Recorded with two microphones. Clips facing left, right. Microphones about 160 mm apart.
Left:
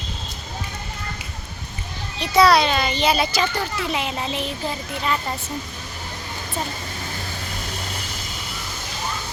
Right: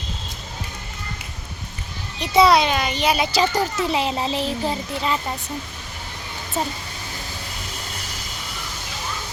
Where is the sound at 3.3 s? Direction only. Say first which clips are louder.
Right 3 dB; 35° right (ahead or behind).